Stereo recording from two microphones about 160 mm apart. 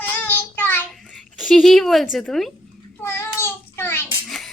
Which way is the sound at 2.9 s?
15° left (ahead or behind).